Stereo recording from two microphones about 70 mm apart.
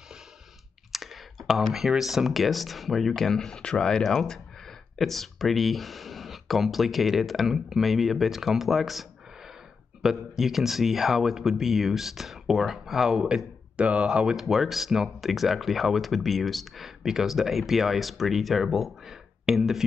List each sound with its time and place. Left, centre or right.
0.9 s speech: centre
10.0 s speech: centre
13.7 s speech: centre
14.3 s speech: centre